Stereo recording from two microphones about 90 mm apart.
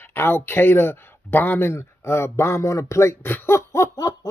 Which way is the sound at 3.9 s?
45° left (ahead or behind).